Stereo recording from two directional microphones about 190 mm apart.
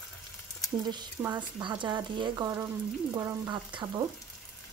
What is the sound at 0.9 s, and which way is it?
Speech, 25° right (ahead or behind).